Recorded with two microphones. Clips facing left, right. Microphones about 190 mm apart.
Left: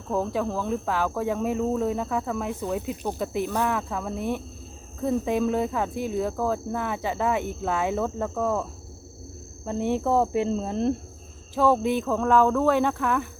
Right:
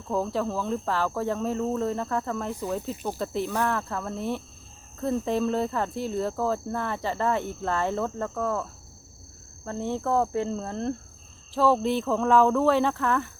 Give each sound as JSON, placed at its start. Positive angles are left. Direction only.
{"t": 0.1, "sound": "speech", "side_deg": 15}
{"t": 9.6, "sound": "speech", "side_deg": 15}